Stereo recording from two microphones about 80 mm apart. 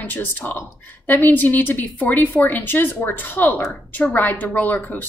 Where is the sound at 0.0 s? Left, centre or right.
Left.